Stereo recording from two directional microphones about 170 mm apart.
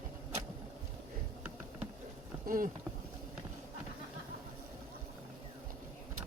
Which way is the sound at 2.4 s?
55° right (ahead or behind).